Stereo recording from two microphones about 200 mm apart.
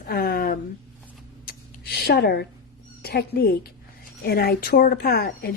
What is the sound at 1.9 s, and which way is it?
A woman's voice, 55° left (ahead or behind).